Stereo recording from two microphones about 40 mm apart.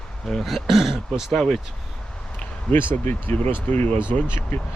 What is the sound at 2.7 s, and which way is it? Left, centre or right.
Speech, left.